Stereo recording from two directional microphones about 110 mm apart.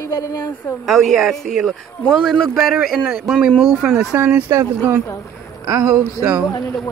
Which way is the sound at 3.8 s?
15° right (ahead or behind).